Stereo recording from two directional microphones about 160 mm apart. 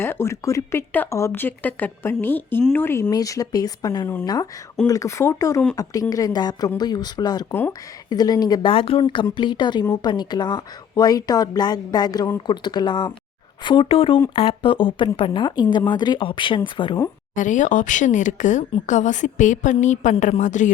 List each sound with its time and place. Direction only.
0.0 s a woman's voice: 15° left (ahead or behind)
7.5 s speech: 15° left (ahead or behind)
8.1 s a woman's voice: 25° left (ahead or behind)
17.3 s speech: 50° left (ahead or behind)